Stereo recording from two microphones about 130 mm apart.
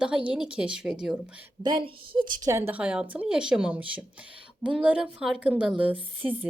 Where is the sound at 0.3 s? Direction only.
5° right (ahead or behind).